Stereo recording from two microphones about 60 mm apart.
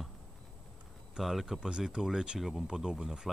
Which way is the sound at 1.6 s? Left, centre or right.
Centre.